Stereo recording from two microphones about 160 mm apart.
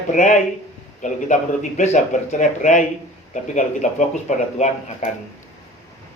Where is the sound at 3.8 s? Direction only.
45° left (ahead or behind).